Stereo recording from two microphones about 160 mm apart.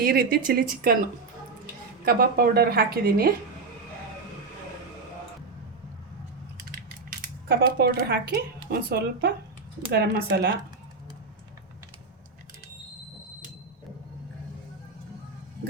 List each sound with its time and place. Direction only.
0.0 s speech: 65° right (ahead or behind)
2.0 s a woman's voice: 70° right (ahead or behind)
7.4 s a woman's voice: 75° right (ahead or behind); by 10.5 s 90° right